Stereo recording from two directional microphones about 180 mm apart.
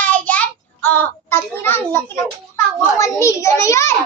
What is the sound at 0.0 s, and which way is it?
Child singing, 10° left (ahead or behind).